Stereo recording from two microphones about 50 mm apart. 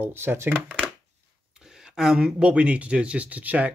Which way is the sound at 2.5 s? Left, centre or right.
Right.